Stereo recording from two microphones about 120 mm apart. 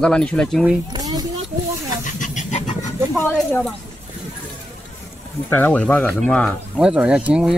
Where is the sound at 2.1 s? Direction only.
90° left.